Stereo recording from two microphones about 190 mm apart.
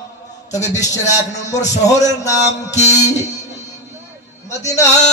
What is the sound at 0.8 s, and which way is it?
Speech, 40° left (ahead or behind).